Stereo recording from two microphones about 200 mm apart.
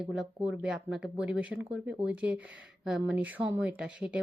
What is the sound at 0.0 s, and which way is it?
Speech, 5° right (ahead or behind).